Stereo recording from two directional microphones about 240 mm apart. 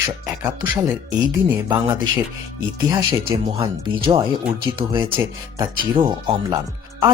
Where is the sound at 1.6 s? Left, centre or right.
Centre.